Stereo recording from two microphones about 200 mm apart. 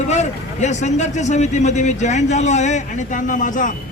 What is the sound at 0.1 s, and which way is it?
A man's voice, 35° left (ahead or behind).